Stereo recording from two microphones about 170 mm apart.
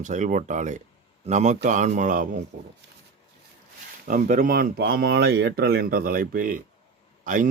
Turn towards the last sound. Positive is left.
turn(degrees=-50)  # may be behind; listen again after turning